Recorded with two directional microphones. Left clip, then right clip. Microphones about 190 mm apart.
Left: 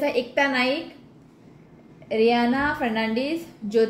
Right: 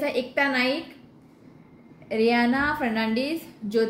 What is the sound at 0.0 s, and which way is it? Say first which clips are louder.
Speech: left 2 dB; centre (ahead or behind).